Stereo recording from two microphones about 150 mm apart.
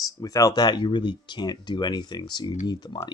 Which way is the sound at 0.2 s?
25° left (ahead or behind).